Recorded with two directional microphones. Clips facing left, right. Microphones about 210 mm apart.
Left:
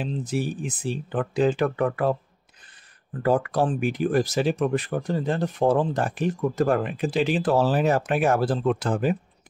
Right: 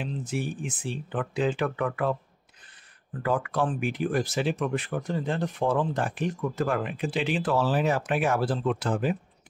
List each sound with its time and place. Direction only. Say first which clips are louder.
0.0 s speech: left 4 dB; 40° left (ahead or behind)
3.2 s speech: left 5 dB; 40° left (ahead or behind)